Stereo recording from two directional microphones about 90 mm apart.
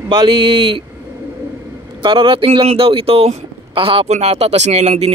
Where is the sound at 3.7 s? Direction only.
80° right.